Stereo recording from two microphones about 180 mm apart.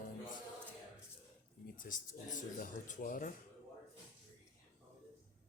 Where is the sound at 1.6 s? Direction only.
50° left (ahead or behind).